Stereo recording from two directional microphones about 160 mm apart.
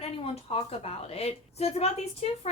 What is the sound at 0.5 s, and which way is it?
A woman's voice, 40° left (ahead or behind).